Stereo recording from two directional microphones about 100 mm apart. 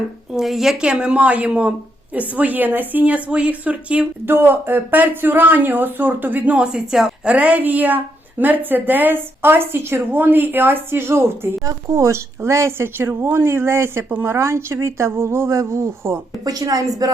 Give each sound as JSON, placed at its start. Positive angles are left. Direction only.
{"t": 0.3, "sound": "a woman's voice", "side_deg": -5}